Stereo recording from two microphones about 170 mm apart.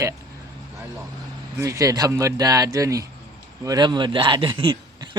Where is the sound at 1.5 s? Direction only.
15° right (ahead or behind).